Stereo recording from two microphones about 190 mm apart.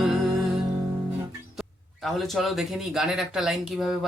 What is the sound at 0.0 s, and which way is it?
Music, centre (ahead or behind).